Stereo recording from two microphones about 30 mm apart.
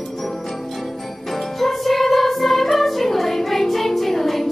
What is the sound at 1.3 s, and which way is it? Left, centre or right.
Music, centre.